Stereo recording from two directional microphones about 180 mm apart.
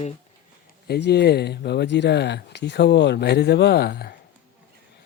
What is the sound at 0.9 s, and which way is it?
Speech, 65° left (ahead or behind).